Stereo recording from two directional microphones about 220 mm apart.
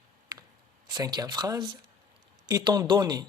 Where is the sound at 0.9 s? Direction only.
15° right (ahead or behind).